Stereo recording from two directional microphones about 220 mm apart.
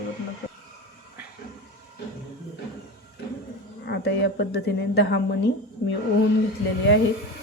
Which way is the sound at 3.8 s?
50° left (ahead or behind).